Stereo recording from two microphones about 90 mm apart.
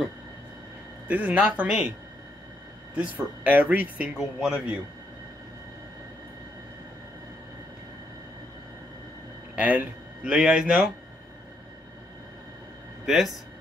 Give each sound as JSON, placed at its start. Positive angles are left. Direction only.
{"t": 1.0, "sound": "a man's voice", "side_deg": -15}
{"t": 3.4, "sound": "a man's voice", "side_deg": -20}
{"t": 9.6, "sound": "a man's voice", "side_deg": -15}
{"t": 13.0, "sound": "speech", "side_deg": 0}